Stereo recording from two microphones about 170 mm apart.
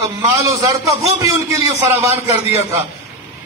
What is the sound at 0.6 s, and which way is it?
A man's voice, 20° right (ahead or behind).